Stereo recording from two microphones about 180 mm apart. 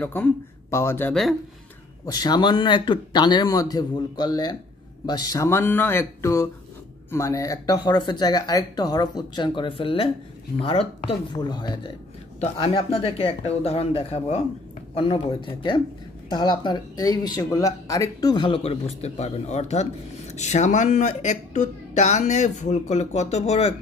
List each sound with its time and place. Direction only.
0.0 s speech: 10° left (ahead or behind)
2.0 s speech: 20° left (ahead or behind)
12.4 s speech: 35° left (ahead or behind)